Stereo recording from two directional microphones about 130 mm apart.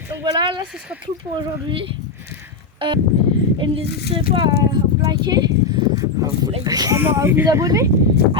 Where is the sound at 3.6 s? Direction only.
45° right (ahead or behind).